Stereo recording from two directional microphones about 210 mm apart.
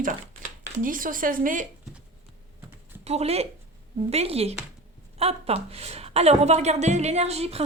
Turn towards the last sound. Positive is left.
turn(degrees=-30)  # may be behind; listen again after turning